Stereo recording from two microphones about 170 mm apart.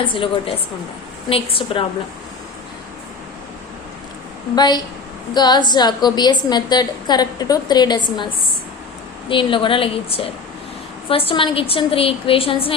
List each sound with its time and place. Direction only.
0.0 s a woman's voice: 30° left (ahead or behind)
4.5 s a woman's voice: 25° left (ahead or behind)
9.3 s a woman's voice: 30° left (ahead or behind)